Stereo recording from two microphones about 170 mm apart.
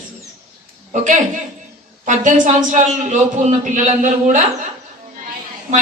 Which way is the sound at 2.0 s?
45° right (ahead or behind).